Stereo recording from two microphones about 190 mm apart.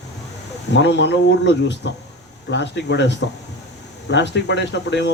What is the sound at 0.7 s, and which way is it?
Speech, 70° left (ahead or behind).